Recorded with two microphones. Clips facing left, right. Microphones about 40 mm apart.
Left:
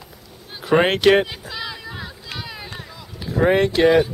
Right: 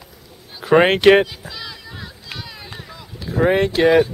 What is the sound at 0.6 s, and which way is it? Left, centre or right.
Speech, centre.